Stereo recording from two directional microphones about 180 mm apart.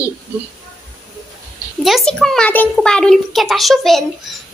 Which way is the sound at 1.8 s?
Centre (ahead or behind).